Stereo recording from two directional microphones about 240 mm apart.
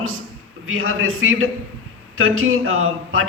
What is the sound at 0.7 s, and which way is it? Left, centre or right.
A man's voice, right.